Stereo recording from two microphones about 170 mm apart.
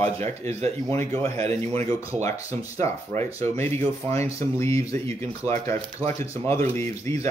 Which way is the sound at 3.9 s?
40° right (ahead or behind).